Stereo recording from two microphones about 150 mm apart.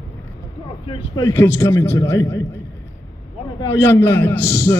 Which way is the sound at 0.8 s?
35° left (ahead or behind).